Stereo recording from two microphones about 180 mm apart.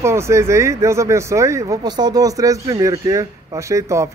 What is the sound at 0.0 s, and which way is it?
Speech, 15° right (ahead or behind).